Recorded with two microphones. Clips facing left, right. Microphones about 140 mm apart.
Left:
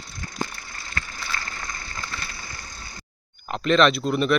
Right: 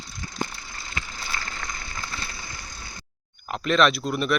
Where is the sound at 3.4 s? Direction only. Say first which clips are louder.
Left 2 dB; centre (ahead or behind).